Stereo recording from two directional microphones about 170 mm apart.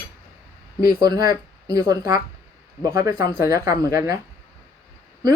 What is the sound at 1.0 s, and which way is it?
Speech, 25° right (ahead or behind).